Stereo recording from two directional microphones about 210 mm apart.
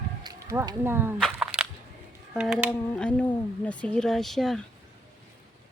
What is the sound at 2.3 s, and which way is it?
Speech, 5° right (ahead or behind).